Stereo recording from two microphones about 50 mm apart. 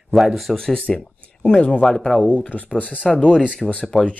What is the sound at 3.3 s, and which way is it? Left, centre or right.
Speech, centre.